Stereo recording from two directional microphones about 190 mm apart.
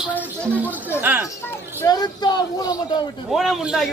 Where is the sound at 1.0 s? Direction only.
10° right (ahead or behind).